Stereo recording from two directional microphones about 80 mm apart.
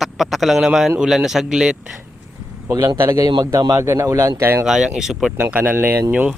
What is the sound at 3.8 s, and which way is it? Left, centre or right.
Speech, right.